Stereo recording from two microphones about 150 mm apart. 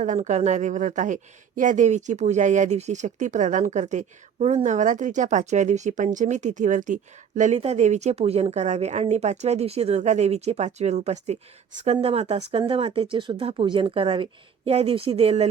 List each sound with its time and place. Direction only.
0.0 s speech: 50° right (ahead or behind)